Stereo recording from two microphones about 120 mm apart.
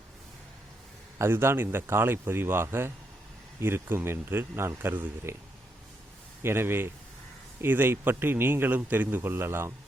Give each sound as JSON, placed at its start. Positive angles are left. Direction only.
{"t": 1.2, "sound": "speech", "side_deg": -20}
{"t": 6.4, "sound": "speech", "side_deg": -20}